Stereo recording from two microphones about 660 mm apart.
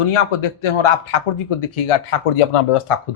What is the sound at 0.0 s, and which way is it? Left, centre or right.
Speech, left.